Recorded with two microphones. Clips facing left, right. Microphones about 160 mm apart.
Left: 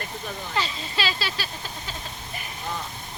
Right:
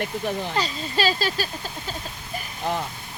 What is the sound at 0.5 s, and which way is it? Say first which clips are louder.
Speech: right 3 dB; 40° right (ahead or behind).